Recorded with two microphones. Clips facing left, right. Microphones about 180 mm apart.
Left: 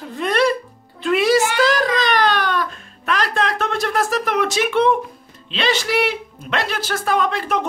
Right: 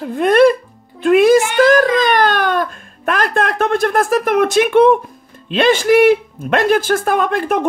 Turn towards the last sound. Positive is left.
turn(degrees=-50)  # may be behind; listen again after turning